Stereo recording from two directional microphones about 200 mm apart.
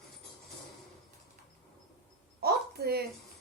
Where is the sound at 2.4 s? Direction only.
50° right (ahead or behind).